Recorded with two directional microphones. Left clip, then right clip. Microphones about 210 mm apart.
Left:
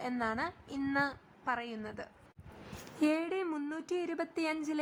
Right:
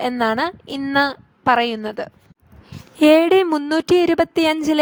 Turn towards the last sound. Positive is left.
turn(degrees=-45)  # may be behind; listen again after turning